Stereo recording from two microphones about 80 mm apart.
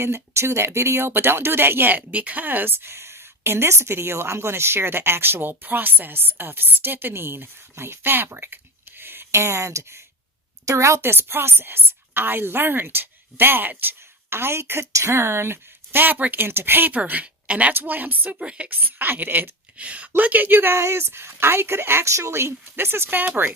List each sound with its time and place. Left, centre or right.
0.0 s speech: right